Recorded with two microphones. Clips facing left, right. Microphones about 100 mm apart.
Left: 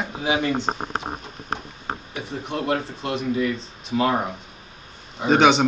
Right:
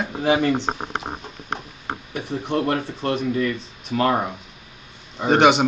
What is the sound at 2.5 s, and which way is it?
Speech, 40° right (ahead or behind).